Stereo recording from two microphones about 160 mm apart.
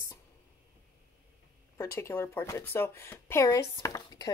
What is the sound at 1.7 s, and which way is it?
Speech, 15° left (ahead or behind).